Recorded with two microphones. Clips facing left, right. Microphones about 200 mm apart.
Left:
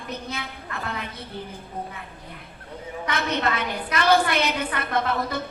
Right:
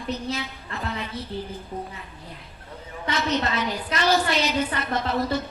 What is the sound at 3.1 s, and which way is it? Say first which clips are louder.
A woman's voice: right 1 dB; 55° left (ahead or behind).